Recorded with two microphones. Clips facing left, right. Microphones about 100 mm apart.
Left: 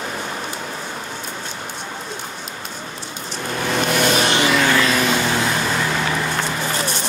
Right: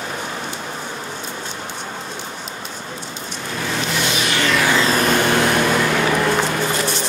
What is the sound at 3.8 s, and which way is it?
Vehicle, 50° left (ahead or behind).